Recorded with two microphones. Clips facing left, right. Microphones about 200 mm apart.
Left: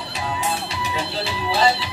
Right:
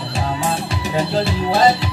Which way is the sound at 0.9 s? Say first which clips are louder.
Right 10 dB; 50° right (ahead or behind).